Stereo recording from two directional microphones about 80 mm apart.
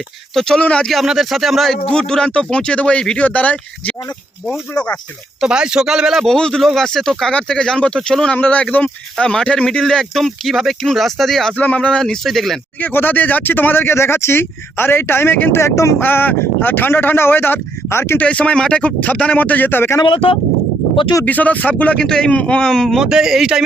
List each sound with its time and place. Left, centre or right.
0.3 s speech: centre
0.9 s speech: centre
5.4 s speech: centre
6.2 s speech: centre
8.4 s speech: centre
11.5 s speech: centre
12.8 s speech: left
16.0 s speech: left
18.2 s speech: centre
21.2 s speech: centre
21.9 s speech: centre
23.0 s speech: centre